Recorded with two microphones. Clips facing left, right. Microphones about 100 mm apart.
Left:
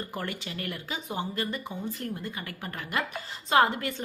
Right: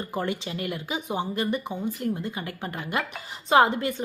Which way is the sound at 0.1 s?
20° right (ahead or behind).